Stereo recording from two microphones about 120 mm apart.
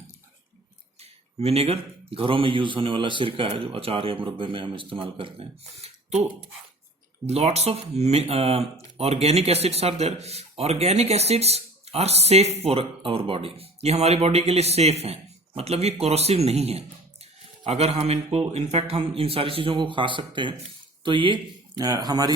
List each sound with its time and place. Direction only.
1.4 s a man's voice: 55° right (ahead or behind)
7.3 s a man's voice: 60° right (ahead or behind); by 22.3 s 30° right (ahead or behind)